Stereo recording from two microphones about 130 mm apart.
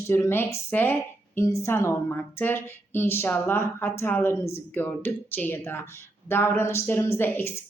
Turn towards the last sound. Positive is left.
turn(degrees=15)  # may be behind; listen again after turning